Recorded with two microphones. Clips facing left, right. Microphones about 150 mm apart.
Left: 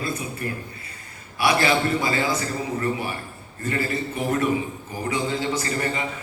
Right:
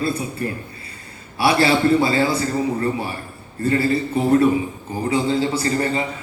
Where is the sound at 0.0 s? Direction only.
30° right (ahead or behind).